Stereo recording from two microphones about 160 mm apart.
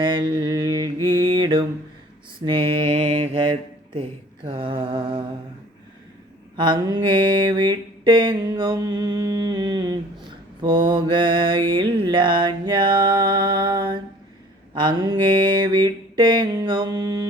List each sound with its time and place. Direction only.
0.0 s mantra: 30° right (ahead or behind)
3.0 s mantra: 45° right (ahead or behind)
3.4 s speech: 30° right (ahead or behind)
4.4 s mantra: 30° right (ahead or behind)
6.6 s mantra: 30° right (ahead or behind)